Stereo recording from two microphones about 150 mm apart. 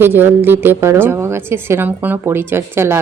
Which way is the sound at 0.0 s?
15° right (ahead or behind).